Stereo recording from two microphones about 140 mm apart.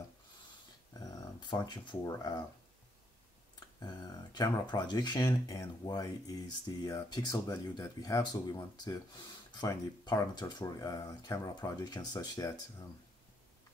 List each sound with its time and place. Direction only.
0.9 s speech: 25° left (ahead or behind)
3.5 s speech: 30° left (ahead or behind)